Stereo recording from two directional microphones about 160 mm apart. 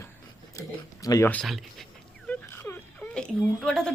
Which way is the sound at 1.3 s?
Centre (ahead or behind).